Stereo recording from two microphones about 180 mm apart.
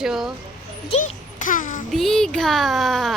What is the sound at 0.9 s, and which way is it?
Speech, 40° left (ahead or behind).